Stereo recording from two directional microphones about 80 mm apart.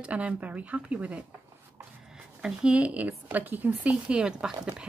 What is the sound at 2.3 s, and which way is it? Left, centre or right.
A woman's voice, centre.